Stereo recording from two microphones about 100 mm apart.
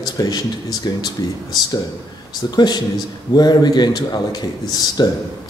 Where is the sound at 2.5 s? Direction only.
45° left (ahead or behind).